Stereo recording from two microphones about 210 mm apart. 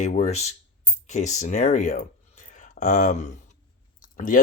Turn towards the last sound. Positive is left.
turn(degrees=40)  # may be behind; listen again after turning